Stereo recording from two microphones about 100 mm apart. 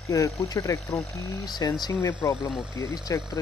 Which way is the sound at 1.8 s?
35° left (ahead or behind).